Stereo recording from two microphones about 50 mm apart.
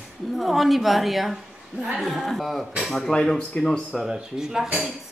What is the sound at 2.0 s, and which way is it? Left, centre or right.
Speech, centre.